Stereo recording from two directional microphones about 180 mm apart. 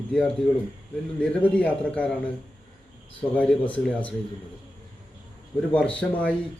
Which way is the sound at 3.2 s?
5° left (ahead or behind).